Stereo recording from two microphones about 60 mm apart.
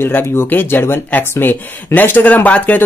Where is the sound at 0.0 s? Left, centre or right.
Left.